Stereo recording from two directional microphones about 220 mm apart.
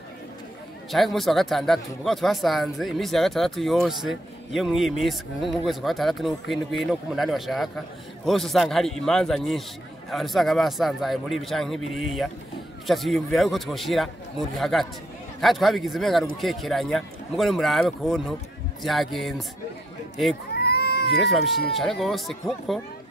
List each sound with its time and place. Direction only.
0.9 s speech: centre (ahead or behind)
20.5 s cat: 45° left (ahead or behind)
21.2 s speech: centre (ahead or behind)